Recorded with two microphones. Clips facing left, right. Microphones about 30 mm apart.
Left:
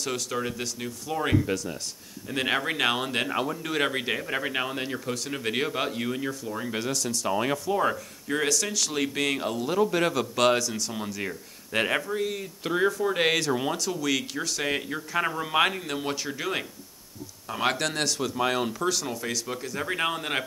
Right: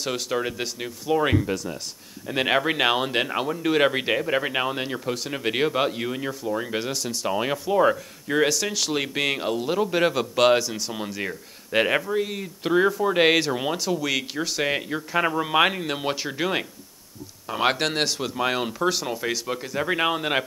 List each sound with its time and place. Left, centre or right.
0.0 s speech: right
1.4 s speech: centre